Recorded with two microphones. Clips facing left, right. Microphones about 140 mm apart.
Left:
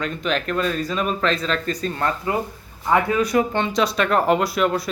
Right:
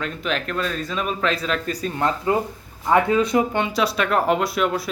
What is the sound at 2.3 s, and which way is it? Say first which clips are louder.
Speech: right 3 dB; 25° right (ahead or behind).